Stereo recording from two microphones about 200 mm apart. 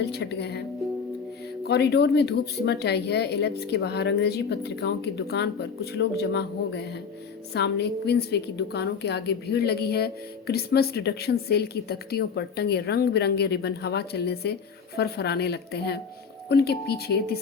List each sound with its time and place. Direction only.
0.0 s a woman's voice: 55° left (ahead or behind)
1.6 s a woman's voice: 55° left (ahead or behind)